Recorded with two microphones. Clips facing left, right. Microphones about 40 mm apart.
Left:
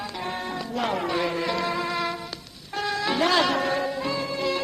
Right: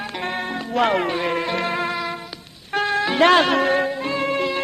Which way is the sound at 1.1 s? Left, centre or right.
Right.